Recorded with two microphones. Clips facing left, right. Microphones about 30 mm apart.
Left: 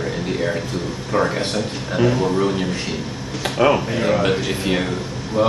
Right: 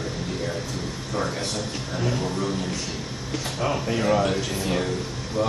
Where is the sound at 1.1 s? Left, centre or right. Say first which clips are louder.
Left 8 dB; left.